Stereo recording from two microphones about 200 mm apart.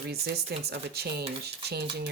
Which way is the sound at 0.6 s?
55° right (ahead or behind).